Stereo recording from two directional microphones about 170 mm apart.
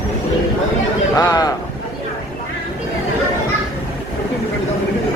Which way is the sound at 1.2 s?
20° left (ahead or behind).